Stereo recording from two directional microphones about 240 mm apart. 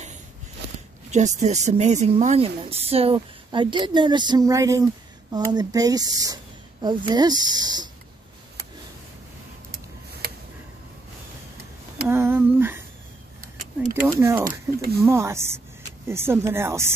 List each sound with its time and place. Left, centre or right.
1.1 s speech: right
12.1 s a sound: centre
14.0 s speech: centre